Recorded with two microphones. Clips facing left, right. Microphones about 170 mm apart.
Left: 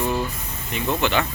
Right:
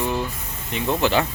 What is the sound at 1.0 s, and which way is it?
Speech, 35° right (ahead or behind).